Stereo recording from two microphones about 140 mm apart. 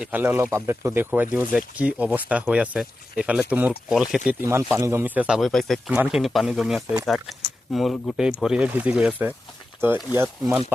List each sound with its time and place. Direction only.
0.0 s speech: 15° right (ahead or behind)
4.4 s speech: 20° right (ahead or behind)